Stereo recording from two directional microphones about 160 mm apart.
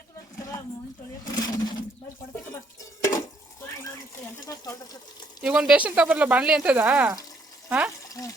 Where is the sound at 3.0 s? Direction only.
20° left (ahead or behind).